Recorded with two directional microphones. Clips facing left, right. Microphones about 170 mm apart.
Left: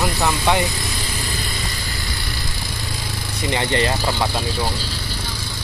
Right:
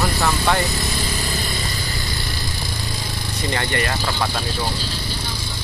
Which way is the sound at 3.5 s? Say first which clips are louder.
Left 4 dB; 25° left (ahead or behind).